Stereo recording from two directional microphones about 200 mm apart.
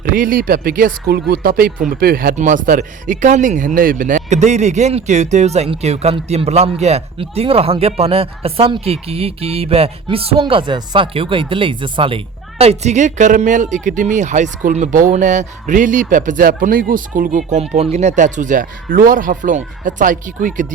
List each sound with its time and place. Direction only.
0.0 s speech: 45° right (ahead or behind)